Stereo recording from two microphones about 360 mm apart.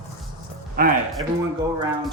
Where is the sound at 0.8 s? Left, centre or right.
Right.